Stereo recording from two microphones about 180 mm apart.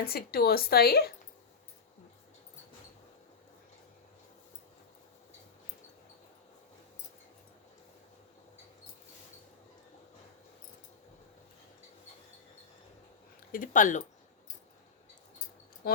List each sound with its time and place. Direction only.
0.0 s speech: 55° left (ahead or behind)
13.5 s speech: 50° left (ahead or behind)